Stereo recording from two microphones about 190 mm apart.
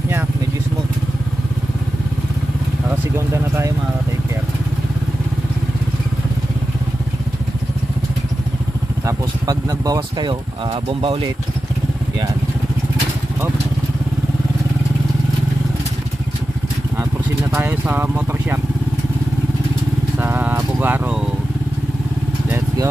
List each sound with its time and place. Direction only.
3.2 s speech: 15° right (ahead or behind)
9.0 s speech: 20° right (ahead or behind)
17.5 s vehicle: 10° right (ahead or behind)
20.1 s vehicle: 10° right (ahead or behind)
22.4 s vehicle: 10° right (ahead or behind)